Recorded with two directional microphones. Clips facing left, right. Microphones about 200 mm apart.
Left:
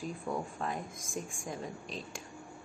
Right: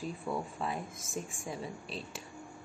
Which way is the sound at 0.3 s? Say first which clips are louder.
Even; 15° left (ahead or behind).